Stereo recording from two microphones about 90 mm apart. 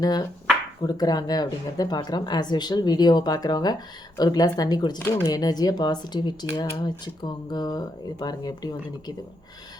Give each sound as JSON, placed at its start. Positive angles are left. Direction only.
{"t": 0.0, "sound": "speech", "side_deg": 45}